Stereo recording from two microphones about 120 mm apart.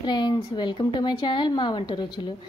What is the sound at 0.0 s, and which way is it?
A woman's voice, 35° left (ahead or behind).